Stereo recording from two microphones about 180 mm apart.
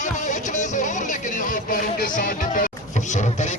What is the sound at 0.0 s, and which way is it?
Music, 45° left (ahead or behind).